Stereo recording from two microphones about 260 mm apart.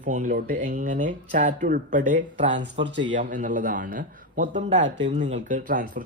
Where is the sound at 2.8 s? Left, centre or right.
Right.